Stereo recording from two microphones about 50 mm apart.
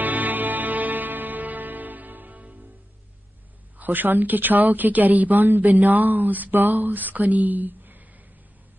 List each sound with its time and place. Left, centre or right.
0.0 s music: right
3.7 s speech: right